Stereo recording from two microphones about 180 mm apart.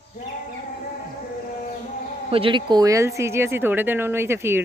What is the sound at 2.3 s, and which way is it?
Speech, 30° right (ahead or behind).